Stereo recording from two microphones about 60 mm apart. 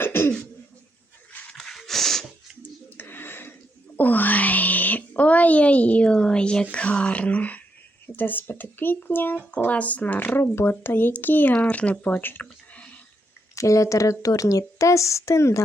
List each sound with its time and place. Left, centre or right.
0.0 s cough: left
1.5 s a sound: centre
3.0 s a sound: left
3.9 s music: left
8.0 s speech: left
10.4 s speech: left
11.5 s speech: left
12.7 s whispering: left
13.6 s speech: left